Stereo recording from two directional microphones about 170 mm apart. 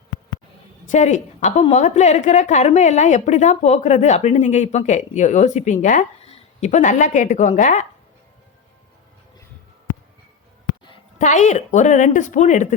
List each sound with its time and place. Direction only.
0.9 s a woman's voice: 45° left (ahead or behind)
11.2 s a woman's voice: 45° left (ahead or behind)